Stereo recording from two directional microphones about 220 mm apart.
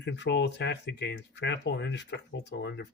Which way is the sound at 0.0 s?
50° left (ahead or behind).